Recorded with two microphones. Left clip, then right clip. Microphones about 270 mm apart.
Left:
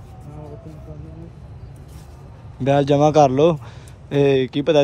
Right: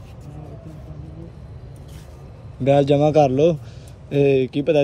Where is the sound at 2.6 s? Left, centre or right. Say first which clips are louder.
Even; centre.